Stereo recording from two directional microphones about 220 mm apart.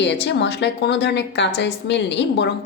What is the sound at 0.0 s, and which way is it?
A woman's voice, 50° left (ahead or behind).